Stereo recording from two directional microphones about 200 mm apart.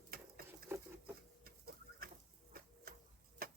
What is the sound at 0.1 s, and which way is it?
Patter, 50° right (ahead or behind).